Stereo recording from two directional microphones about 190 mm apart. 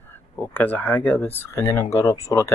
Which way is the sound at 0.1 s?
10° left (ahead or behind).